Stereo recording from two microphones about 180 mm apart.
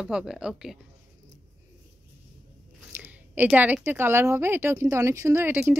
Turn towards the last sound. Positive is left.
turn(degrees=-10)  # may be behind; listen again after turning